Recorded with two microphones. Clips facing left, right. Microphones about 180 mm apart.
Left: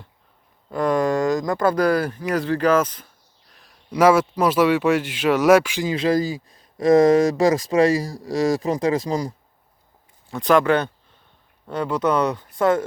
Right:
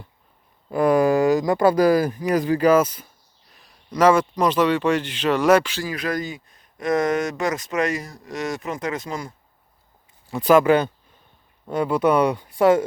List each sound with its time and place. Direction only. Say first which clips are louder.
0.7 s speech: right 3 dB; 10° right (ahead or behind); by 5.9 s 10° left (ahead or behind)
5.9 s speech: left 7 dB; 25° left (ahead or behind)
10.3 s speech: right 2 dB; 10° right (ahead or behind)